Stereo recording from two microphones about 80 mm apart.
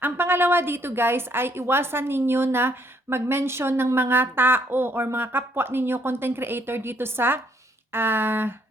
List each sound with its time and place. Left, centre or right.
0.0 s a woman's voice: right